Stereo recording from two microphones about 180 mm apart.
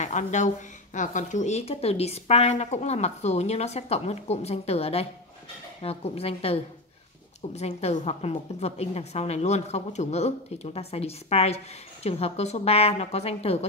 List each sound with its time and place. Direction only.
0.0 s a woman's voice: 40° left (ahead or behind)